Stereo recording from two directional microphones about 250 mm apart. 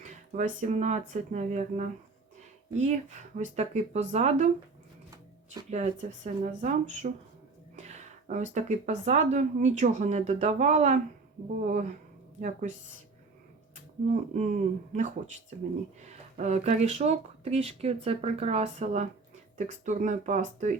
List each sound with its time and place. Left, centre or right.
0.0 s speech: right
5.7 s speech: right
14.1 s speech: right